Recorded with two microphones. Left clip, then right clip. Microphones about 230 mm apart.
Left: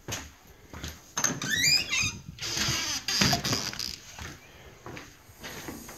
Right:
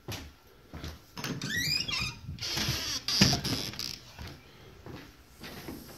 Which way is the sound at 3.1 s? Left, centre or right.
Right.